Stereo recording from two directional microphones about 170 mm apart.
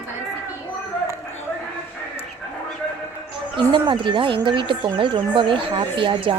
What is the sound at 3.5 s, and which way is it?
Speech, 30° right (ahead or behind).